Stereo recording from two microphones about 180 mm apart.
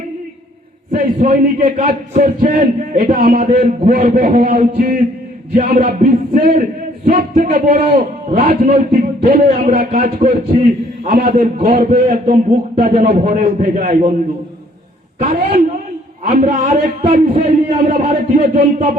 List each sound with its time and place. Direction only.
0.9 s a man's voice: 45° right (ahead or behind)
9.0 s a man's voice: 40° right (ahead or behind)
15.2 s a man's voice: 45° right (ahead or behind); by 17.8 s 30° right (ahead or behind)
18.1 s a man's voice: 50° right (ahead or behind)
18.5 s speech: 35° right (ahead or behind)